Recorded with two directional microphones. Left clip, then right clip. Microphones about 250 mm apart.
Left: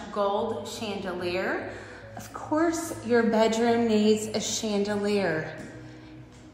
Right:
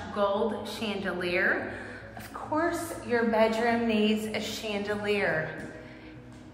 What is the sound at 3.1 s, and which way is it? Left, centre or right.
A woman's voice, left.